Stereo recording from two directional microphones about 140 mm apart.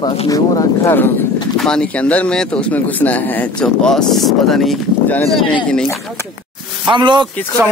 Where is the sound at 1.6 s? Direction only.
5° left (ahead or behind).